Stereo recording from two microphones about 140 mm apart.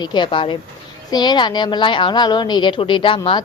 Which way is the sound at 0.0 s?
35° left (ahead or behind).